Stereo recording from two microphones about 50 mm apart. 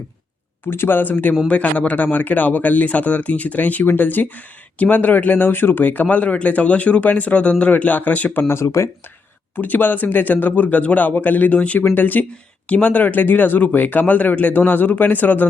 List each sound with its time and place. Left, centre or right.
0.7 s a man's voice: left
8.3 s speech: left
8.5 s speech: left
9.6 s a man's voice: left